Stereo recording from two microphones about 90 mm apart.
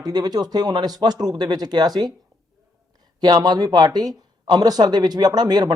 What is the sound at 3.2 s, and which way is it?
A man's voice, 50° right (ahead or behind).